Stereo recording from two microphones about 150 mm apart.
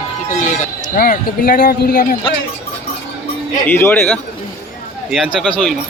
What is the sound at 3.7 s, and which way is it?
Speech, 15° left (ahead or behind).